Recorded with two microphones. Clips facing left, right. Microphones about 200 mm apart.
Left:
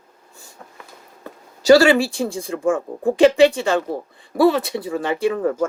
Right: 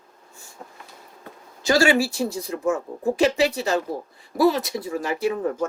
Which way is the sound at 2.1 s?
30° left (ahead or behind).